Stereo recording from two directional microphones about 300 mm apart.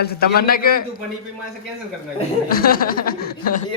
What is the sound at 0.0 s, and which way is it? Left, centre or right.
Speech, left.